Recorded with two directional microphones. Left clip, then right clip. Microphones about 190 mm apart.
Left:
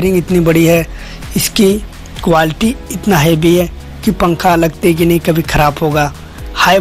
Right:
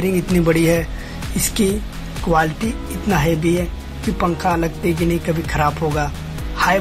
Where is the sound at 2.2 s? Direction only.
40° left (ahead or behind).